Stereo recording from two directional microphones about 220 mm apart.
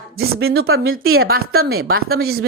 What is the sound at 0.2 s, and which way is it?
Speech, 65° right (ahead or behind).